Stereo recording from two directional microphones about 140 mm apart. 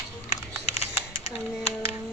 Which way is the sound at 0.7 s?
45° left (ahead or behind).